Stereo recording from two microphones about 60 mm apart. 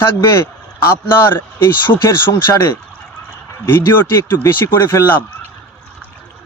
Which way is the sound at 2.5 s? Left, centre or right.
Left.